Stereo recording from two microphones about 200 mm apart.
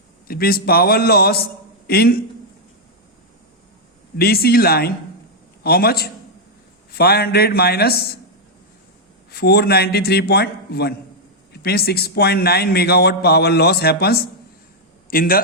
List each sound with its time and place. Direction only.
0.3 s a man's voice: 50° left (ahead or behind)
4.2 s a man's voice: 50° left (ahead or behind)
9.3 s a man's voice: 55° left (ahead or behind)